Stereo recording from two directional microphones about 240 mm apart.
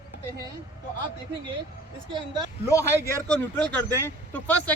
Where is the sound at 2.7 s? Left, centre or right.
Centre.